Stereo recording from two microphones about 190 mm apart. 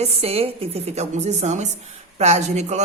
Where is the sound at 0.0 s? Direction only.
30° right (ahead or behind).